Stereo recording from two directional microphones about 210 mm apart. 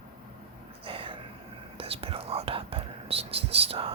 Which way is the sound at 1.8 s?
25° right (ahead or behind).